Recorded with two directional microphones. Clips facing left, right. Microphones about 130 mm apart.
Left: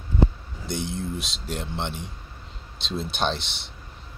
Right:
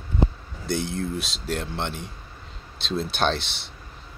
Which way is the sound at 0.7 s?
20° left (ahead or behind).